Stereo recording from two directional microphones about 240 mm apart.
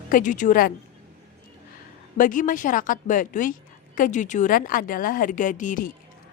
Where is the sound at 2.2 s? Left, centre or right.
Left.